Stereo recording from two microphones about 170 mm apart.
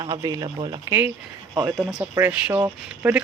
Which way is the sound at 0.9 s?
10° right (ahead or behind).